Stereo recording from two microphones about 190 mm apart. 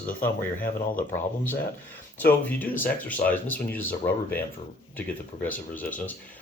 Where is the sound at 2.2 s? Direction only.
10° left (ahead or behind).